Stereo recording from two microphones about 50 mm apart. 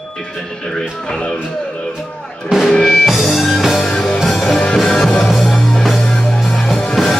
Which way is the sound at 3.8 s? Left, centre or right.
Centre.